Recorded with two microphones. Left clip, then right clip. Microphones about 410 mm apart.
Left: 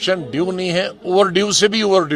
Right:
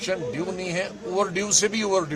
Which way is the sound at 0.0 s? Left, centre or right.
Left.